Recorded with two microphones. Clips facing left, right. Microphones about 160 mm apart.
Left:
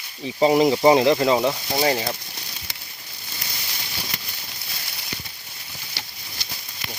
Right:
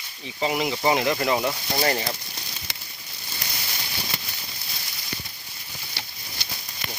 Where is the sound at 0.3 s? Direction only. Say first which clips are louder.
Left 9 dB; 35° left (ahead or behind); by 2.0 s 10° left (ahead or behind).